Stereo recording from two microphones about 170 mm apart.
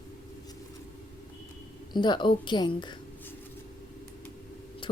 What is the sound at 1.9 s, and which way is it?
A woman's voice, 25° left (ahead or behind).